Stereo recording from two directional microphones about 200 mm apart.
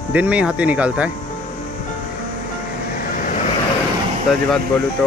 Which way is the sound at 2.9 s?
40° left (ahead or behind).